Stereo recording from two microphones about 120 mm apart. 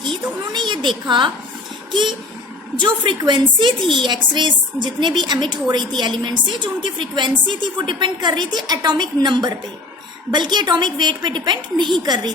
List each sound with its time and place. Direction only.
0.5 s a woman's voice: 40° right (ahead or behind)